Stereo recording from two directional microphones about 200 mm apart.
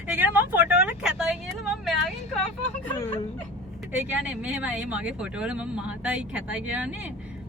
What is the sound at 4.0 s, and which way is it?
A woman's voice, 5° right (ahead or behind).